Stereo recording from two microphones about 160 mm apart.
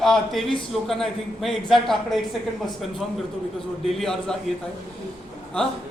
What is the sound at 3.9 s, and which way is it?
Speech, centre (ahead or behind).